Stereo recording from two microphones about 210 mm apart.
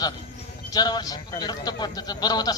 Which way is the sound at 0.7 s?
20° left (ahead or behind).